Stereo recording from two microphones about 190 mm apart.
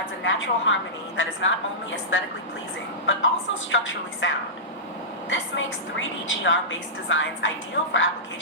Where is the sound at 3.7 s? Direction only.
80° left.